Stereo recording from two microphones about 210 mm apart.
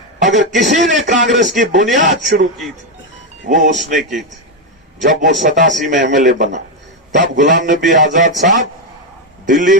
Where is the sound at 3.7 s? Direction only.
Centre (ahead or behind).